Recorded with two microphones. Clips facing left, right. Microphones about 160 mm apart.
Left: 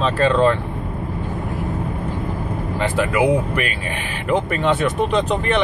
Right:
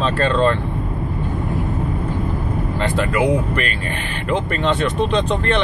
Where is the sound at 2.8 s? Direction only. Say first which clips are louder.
Left 1 dB; 5° left (ahead or behind).